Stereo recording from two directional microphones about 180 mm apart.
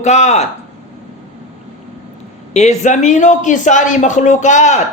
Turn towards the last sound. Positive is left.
turn(degrees=40)  # may be behind; listen again after turning